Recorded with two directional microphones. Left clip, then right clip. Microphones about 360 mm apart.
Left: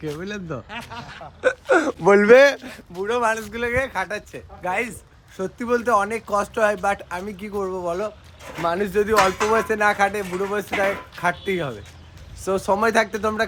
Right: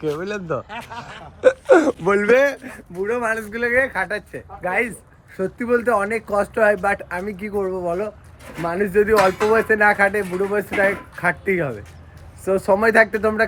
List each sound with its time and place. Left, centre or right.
0.0 s speech: centre
2.0 s speech: centre
2.9 s speech: centre
9.1 s speech: left
9.5 s speech: centre
10.2 s speech: left
11.2 s speech: centre